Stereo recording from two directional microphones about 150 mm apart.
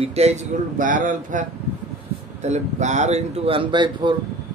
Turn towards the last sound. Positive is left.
turn(degrees=-30)  # may be behind; listen again after turning